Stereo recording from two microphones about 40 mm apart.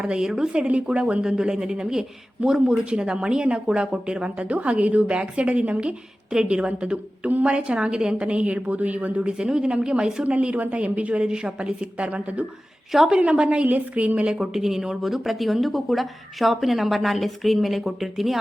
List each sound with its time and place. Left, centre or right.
0.2 s speech: centre
0.5 s speech: right
8.5 s speech: right
9.4 s speech: centre; by 11.2 s right
11.2 s speech: right
13.7 s speech: right
14.3 s a woman's voice: centre